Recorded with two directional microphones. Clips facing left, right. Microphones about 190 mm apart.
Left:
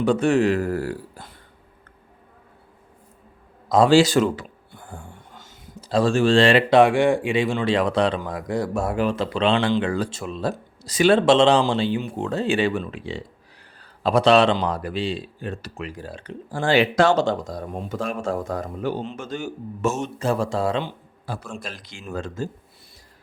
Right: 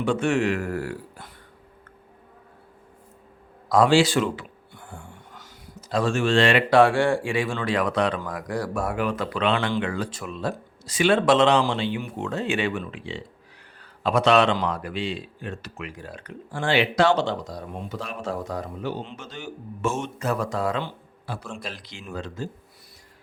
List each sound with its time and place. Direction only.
0.0 s a man's voice: 35° left (ahead or behind)
3.8 s a sound: 40° left (ahead or behind)
6.7 s a man's voice: 20° left (ahead or behind)
21.3 s a man's voice: 40° left (ahead or behind)